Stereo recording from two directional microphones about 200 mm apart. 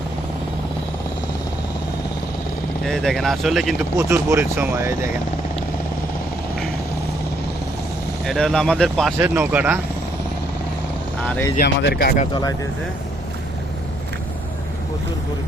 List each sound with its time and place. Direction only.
2.8 s speech: centre (ahead or behind)
3.9 s speech: 15° right (ahead or behind)
8.3 s speech: centre (ahead or behind)
9.1 s speech: 10° right (ahead or behind)
11.3 s speech: 10° left (ahead or behind)
11.5 s speech: 55° left (ahead or behind)
12.2 s speech: 20° left (ahead or behind)